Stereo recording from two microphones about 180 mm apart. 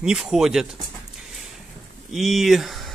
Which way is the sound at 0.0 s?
5° right (ahead or behind).